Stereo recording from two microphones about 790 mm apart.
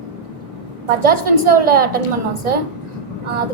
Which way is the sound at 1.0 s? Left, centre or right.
Right.